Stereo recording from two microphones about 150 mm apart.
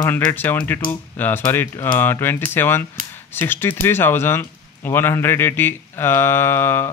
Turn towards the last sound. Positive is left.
turn(degrees=15)  # may be behind; listen again after turning